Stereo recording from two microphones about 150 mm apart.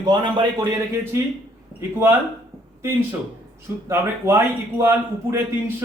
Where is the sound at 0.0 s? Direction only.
30° right (ahead or behind).